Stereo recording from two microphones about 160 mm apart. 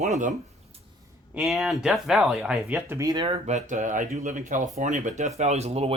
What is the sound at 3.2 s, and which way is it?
Speech, 35° right (ahead or behind).